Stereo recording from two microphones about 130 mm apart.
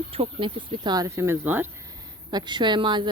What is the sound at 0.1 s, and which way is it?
Speech, 45° right (ahead or behind).